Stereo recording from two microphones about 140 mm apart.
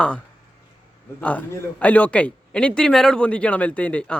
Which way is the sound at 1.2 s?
10° left (ahead or behind).